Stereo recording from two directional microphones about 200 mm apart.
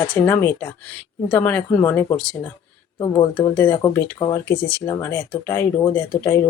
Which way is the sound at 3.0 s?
20° left (ahead or behind).